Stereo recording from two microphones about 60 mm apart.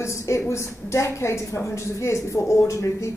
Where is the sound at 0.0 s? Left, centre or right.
Left.